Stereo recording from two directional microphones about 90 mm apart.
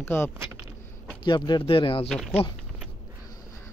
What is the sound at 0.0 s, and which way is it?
Speech, 25° left (ahead or behind).